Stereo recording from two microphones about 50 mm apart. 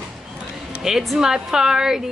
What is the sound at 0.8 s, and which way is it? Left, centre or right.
Speech, centre.